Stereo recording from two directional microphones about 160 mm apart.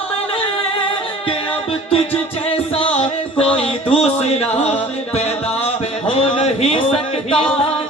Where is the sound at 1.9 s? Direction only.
35° left (ahead or behind).